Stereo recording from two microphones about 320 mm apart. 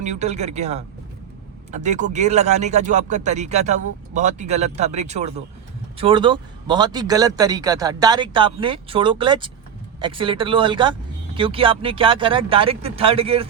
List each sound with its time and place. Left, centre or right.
0.0 s speech: right